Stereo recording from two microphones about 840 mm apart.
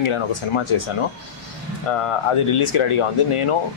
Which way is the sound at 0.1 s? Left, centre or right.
Left.